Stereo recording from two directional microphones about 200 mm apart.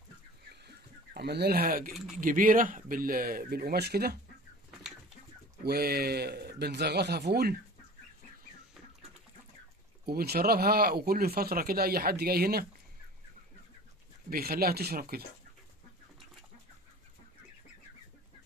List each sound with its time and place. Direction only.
0.7 s a sound: 55° right (ahead or behind)
2.1 s speech: 45° right (ahead or behind)
5.6 s speech: 50° right (ahead or behind)
10.0 s speech: 50° right (ahead or behind)
14.3 s speech: 50° right (ahead or behind)